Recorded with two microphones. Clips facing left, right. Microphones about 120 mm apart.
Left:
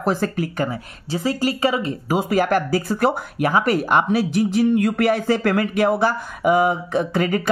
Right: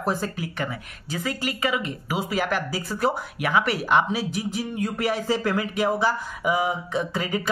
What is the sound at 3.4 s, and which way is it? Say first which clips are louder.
Speech: left 7 dB; 40° left (ahead or behind).